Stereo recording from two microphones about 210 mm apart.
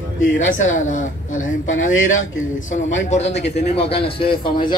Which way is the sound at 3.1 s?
30° left (ahead or behind).